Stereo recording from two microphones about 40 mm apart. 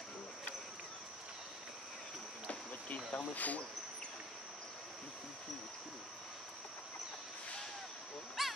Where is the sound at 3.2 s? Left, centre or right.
Left.